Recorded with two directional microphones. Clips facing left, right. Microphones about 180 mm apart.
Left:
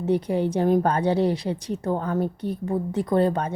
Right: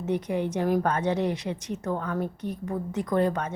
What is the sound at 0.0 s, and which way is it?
A woman's voice, 30° left (ahead or behind).